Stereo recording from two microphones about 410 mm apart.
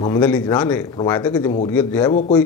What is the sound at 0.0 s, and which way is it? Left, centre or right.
A man's voice, centre.